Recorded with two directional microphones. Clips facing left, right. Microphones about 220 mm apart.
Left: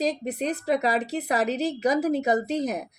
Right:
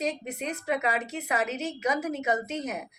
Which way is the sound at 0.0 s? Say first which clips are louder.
Left 5 dB; 35° left (ahead or behind).